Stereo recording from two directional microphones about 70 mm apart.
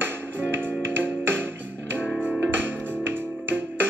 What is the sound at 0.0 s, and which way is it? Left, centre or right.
Music, right.